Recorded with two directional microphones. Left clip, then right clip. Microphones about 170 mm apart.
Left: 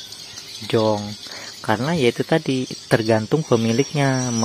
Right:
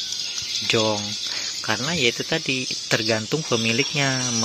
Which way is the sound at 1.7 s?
25° left (ahead or behind).